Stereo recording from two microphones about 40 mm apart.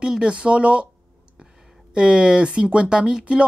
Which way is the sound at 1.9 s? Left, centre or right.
Right.